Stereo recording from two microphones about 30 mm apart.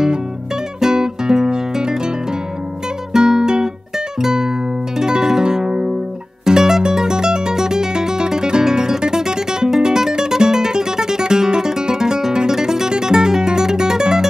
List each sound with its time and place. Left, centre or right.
0.9 s music: right
3.1 s music: centre